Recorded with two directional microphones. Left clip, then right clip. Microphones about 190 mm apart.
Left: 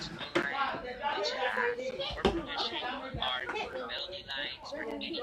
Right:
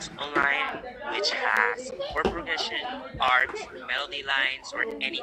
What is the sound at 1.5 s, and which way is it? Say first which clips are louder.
Speech: right 7 dB; 45° right (ahead or behind).